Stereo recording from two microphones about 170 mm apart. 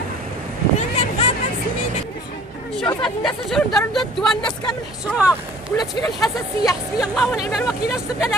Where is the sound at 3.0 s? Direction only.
Centre (ahead or behind).